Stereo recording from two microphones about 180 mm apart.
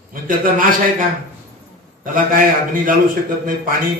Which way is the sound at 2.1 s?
50° right (ahead or behind).